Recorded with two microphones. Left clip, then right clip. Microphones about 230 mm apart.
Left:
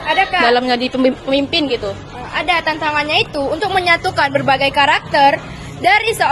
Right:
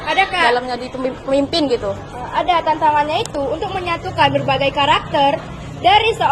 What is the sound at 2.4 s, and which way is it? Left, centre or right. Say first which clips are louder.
A woman's voice: right 2 dB; left.